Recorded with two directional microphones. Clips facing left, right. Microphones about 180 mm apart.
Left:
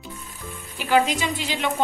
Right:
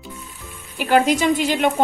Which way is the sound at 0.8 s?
55° right (ahead or behind).